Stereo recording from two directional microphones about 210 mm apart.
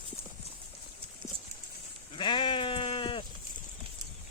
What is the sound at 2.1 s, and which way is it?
Sheep, 25° left (ahead or behind).